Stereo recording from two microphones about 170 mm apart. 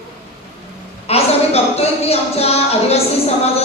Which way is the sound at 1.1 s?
35° left (ahead or behind).